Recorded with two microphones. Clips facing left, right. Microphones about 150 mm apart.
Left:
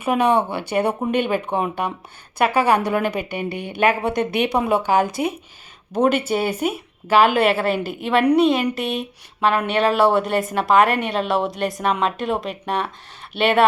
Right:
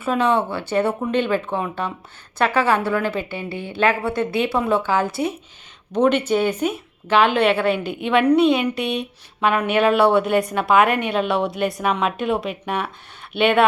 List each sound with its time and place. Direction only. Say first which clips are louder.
0.0 s a woman's voice: left 1 dB; 15° left (ahead or behind); by 13.7 s centre (ahead or behind)